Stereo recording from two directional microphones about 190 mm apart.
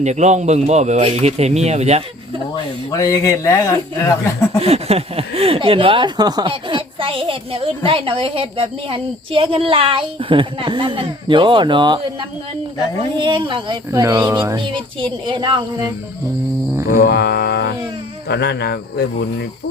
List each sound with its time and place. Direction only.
0.0 s speech: 35° right (ahead or behind)
2.9 s speech: 15° left (ahead or behind)
4.6 s a woman's voice: 30° right (ahead or behind)
13.1 s a woman's voice: 25° right (ahead or behind)
16.8 s speech: 50° left (ahead or behind)